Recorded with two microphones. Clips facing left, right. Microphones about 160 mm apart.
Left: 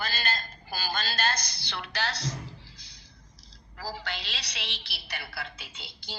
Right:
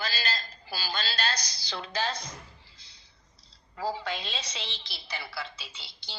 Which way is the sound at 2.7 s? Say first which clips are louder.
Left 6 dB; 85° left.